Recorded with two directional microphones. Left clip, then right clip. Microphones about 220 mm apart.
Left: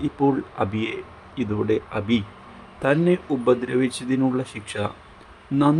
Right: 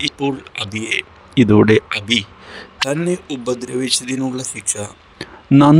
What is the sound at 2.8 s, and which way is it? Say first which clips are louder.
Speech: even; centre (ahead or behind).